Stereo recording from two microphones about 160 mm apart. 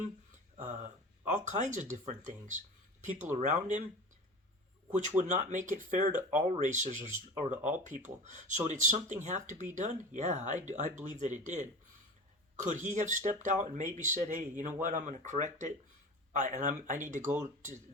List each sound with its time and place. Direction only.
0.5 s speech: 45° right (ahead or behind)
4.9 s speech: 50° right (ahead or behind)